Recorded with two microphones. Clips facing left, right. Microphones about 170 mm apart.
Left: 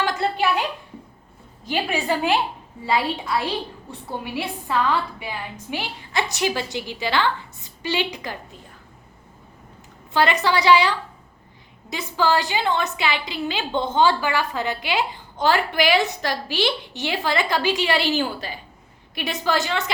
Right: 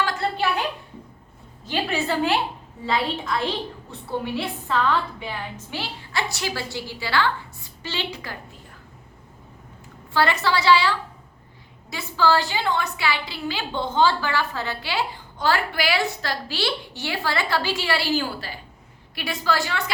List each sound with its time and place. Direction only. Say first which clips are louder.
0.0 s a sound: left 2 dB; 15° left (ahead or behind)
1.6 s a woman's voice: left 1 dB; 15° left (ahead or behind)
10.1 s a woman's voice: left 2 dB; 15° left (ahead or behind)